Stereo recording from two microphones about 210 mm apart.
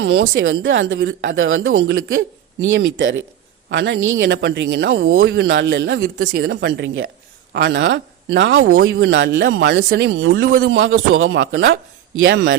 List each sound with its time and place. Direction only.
0.1 s speech: 70° right (ahead or behind)
6.0 s a woman's voice: 45° right (ahead or behind)
10.8 s speech: 70° right (ahead or behind)